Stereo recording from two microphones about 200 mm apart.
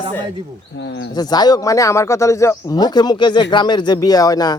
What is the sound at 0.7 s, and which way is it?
Speech, 60° left (ahead or behind).